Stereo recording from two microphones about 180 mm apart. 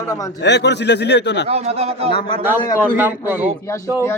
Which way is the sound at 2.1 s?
30° left (ahead or behind).